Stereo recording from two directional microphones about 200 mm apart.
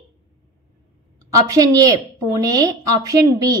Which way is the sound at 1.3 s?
15° right (ahead or behind).